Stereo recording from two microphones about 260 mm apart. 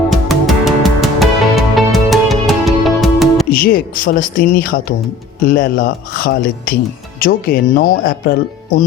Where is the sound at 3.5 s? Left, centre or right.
Left.